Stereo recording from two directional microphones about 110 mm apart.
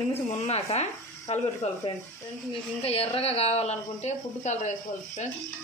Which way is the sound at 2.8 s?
60° left (ahead or behind).